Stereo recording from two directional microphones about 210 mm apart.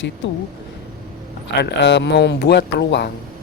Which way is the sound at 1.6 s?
55° left (ahead or behind).